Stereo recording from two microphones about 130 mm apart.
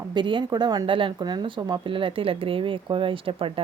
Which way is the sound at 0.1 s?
35° right (ahead or behind).